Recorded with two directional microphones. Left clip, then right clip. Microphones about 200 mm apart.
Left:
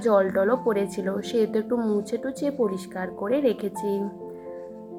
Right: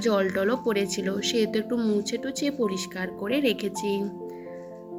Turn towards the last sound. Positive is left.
turn(degrees=-45)  # may be behind; listen again after turning